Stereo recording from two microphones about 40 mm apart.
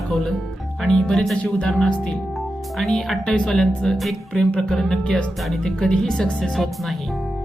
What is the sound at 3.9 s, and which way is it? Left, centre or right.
Speech, centre.